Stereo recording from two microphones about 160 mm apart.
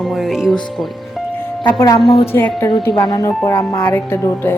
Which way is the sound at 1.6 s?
15° left (ahead or behind).